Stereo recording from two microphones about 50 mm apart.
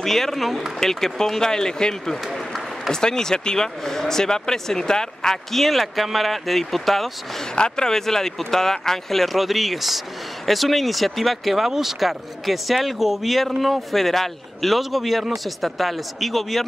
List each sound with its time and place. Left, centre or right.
0.0 s speech: centre
2.2 s applause: centre
2.9 s speech: centre
7.5 s speech: centre